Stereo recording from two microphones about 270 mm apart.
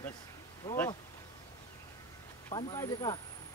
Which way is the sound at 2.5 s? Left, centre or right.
Centre.